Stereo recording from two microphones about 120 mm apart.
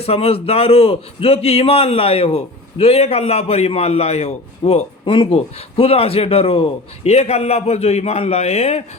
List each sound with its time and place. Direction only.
0.0 s a man's voice: 55° left (ahead or behind)
5.1 s a man's voice: 50° left (ahead or behind)